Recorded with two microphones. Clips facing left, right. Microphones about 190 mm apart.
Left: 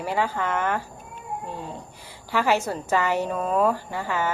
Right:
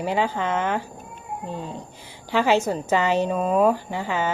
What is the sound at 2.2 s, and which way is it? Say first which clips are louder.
A woman's voice: right 3 dB; 20° right (ahead or behind).